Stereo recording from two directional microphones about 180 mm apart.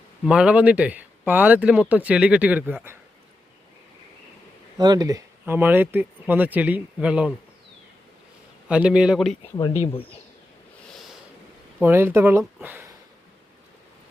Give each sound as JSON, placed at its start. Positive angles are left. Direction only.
{"t": 0.3, "sound": "speech", "side_deg": -5}
{"t": 4.8, "sound": "speech", "side_deg": -20}
{"t": 8.6, "sound": "a man's voice", "side_deg": -5}
{"t": 9.7, "sound": "speech", "side_deg": 35}
{"t": 11.8, "sound": "speech", "side_deg": -10}